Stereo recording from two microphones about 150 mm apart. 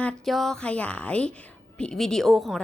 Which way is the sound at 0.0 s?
5° left (ahead or behind).